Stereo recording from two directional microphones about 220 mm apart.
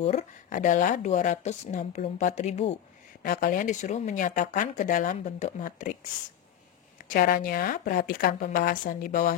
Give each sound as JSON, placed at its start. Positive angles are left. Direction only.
{"t": 0.0, "sound": "speech", "side_deg": 30}
{"t": 3.2, "sound": "speech", "side_deg": 40}
{"t": 7.1, "sound": "speech", "side_deg": 40}